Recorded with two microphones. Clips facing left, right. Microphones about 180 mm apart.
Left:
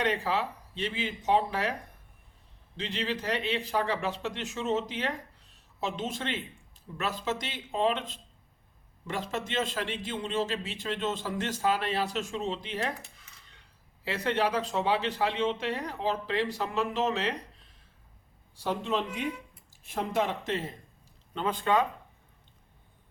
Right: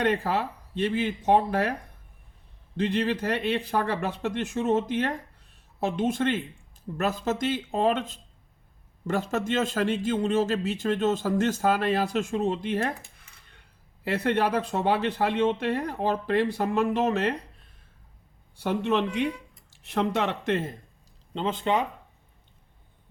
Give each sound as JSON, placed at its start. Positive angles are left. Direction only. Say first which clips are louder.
{"t": 0.0, "sound": "a man's voice", "louder": "right 4 dB", "side_deg": -50}
{"t": 2.7, "sound": "a man's voice", "louder": "right 8 dB", "side_deg": -55}
{"t": 14.0, "sound": "speech", "louder": "right 4 dB", "side_deg": -55}
{"t": 18.5, "sound": "speech", "louder": "right 5 dB", "side_deg": -65}
{"t": 21.3, "sound": "speech", "louder": "right 1 dB", "side_deg": -25}